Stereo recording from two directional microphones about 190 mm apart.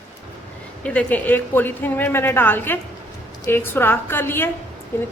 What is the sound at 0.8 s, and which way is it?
Speech, 5° left (ahead or behind).